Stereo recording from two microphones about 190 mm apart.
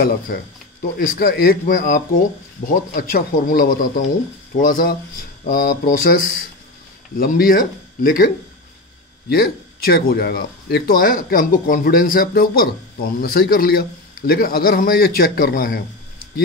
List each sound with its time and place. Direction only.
0.9 s speech: 50° left (ahead or behind)
9.3 s speech: 55° left (ahead or behind)